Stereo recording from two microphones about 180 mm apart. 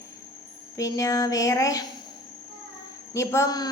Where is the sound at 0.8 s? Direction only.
20° left (ahead or behind).